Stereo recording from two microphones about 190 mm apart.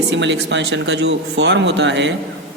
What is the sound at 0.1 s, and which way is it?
Speech, 70° right (ahead or behind).